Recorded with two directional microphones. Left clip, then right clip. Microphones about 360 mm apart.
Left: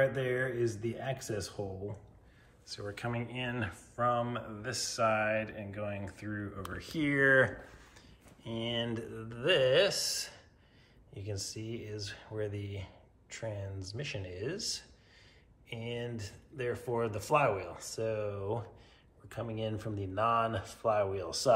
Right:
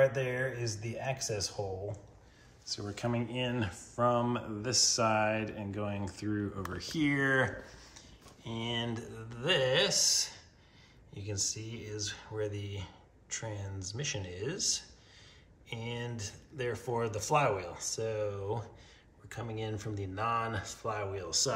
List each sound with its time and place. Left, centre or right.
0.1 s speech: centre